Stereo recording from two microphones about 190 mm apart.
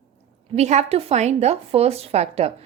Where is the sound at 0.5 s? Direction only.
35° right (ahead or behind).